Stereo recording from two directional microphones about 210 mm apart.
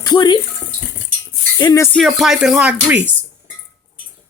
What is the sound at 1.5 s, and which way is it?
Speech, 15° left (ahead or behind).